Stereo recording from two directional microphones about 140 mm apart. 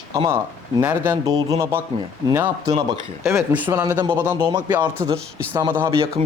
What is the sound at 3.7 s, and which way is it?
Speech, 20° right (ahead or behind).